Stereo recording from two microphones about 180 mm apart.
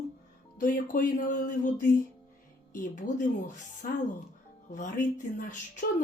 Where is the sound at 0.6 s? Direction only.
50° left (ahead or behind).